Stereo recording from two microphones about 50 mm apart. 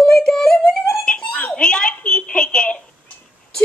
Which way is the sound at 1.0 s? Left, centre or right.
Left.